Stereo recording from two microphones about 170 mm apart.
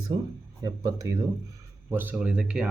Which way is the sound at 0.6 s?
20° right (ahead or behind).